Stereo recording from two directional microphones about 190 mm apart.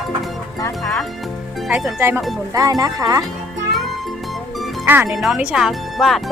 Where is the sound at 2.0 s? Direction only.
15° right (ahead or behind).